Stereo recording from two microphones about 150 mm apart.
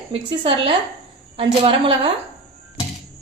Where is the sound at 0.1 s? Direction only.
35° right (ahead or behind).